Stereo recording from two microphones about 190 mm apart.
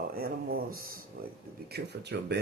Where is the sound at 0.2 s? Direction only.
50° right (ahead or behind).